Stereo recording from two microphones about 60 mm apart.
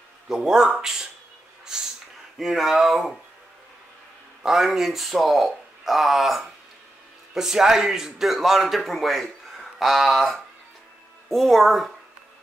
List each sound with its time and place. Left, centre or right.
0.3 s speech: centre
1.7 s snort: centre
2.3 s a man's voice: centre
4.4 s a man's voice: centre